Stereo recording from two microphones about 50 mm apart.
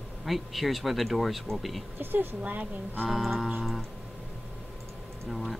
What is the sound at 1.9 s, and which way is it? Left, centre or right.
Speech, right.